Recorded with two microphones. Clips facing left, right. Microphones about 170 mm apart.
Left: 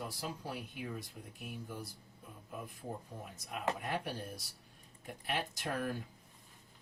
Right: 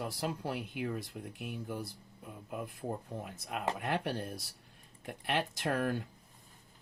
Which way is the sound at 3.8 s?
70° right (ahead or behind).